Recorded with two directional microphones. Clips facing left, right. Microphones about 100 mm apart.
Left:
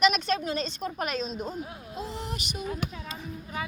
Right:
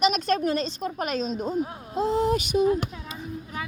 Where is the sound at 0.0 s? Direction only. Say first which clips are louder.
Right 2 dB; 35° right (ahead or behind).